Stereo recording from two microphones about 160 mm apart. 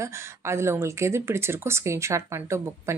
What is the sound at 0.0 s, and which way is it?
Speech, 15° right (ahead or behind).